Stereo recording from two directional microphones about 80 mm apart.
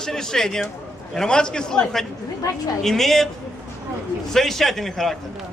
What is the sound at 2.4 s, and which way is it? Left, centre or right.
Speech, left.